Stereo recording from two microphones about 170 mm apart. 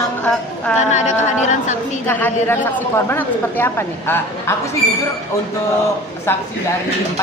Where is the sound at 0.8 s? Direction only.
45° left (ahead or behind).